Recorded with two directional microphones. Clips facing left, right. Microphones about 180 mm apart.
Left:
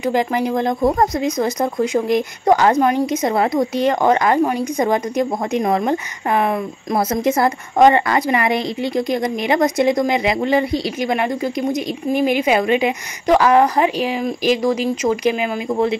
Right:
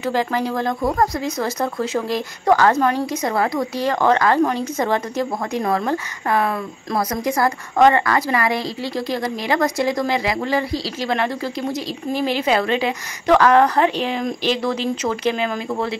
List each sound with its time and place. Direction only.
0.0 s speech: 15° left (ahead or behind)